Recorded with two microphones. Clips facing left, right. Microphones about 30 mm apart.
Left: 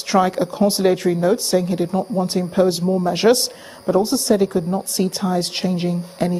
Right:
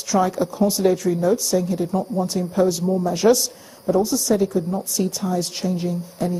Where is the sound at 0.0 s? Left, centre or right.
Left.